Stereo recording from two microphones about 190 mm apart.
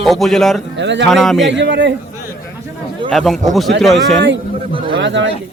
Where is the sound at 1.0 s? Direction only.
Centre (ahead or behind).